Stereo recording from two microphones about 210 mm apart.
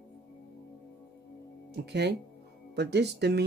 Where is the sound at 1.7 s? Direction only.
50° right (ahead or behind).